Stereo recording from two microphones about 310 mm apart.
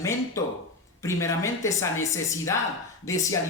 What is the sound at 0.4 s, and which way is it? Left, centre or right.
Speech, centre.